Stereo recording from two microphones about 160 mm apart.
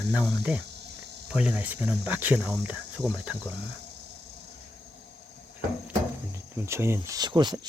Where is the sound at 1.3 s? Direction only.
10° right (ahead or behind).